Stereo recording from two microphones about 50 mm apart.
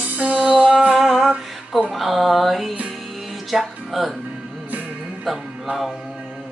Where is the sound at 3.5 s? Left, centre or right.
Centre.